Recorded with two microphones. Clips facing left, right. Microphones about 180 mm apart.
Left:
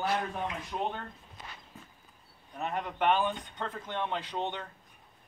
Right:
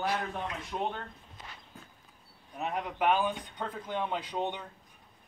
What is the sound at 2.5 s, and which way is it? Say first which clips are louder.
Speech: even; 5° right (ahead or behind).